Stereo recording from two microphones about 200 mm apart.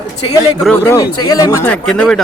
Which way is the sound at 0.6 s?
10° left (ahead or behind).